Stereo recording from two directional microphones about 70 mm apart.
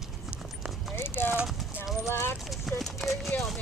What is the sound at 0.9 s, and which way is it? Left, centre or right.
Clip-clop, left.